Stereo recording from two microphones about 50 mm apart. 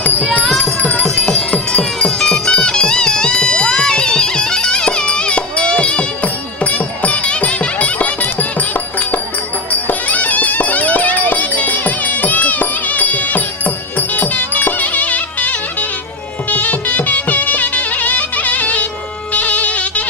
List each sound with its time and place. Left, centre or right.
0.6 s music: left
1.1 s music: centre
1.8 s music: centre; by 20.1 s left